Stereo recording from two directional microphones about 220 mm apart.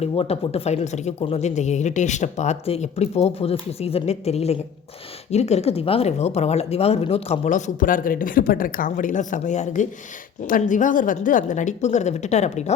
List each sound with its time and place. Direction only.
0.0 s speech: 25° left (ahead or behind)